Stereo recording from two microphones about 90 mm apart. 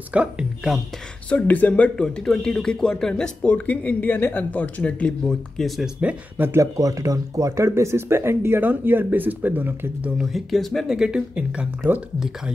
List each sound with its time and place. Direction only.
0.1 s speech: 15° right (ahead or behind)
1.3 s speech: 15° left (ahead or behind)
5.9 s speech: 20° right (ahead or behind)
6.6 s speech: 35° right (ahead or behind); by 10.1 s 20° right (ahead or behind)
10.1 s speech: centre (ahead or behind)
11.0 s speech: 10° right (ahead or behind)